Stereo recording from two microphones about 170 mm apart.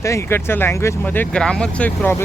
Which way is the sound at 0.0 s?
15° left (ahead or behind).